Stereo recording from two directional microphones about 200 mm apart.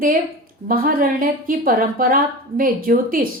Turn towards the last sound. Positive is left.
turn(degrees=-45)  # may be behind; listen again after turning